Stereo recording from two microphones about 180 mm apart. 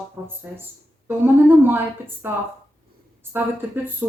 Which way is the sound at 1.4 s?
10° right (ahead or behind).